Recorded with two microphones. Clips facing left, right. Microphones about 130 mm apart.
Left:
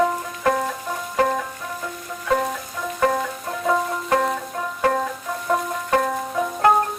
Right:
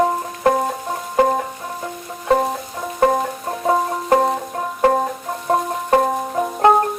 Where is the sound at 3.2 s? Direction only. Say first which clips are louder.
Right 3 dB; 35° right (ahead or behind).